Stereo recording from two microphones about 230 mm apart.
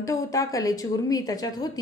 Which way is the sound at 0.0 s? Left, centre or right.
Centre.